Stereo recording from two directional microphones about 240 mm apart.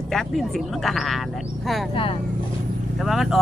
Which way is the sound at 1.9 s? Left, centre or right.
Left.